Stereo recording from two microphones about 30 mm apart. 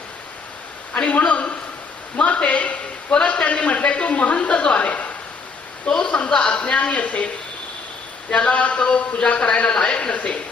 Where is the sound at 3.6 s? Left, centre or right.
Left.